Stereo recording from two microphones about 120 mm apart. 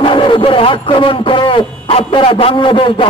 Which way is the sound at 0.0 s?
45° left (ahead or behind).